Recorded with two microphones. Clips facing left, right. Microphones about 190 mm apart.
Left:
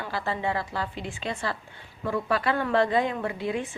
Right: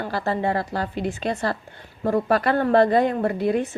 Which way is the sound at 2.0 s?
40° right (ahead or behind).